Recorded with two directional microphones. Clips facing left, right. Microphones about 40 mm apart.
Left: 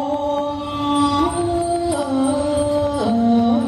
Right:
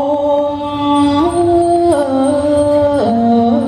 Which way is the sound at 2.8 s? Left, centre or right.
Right.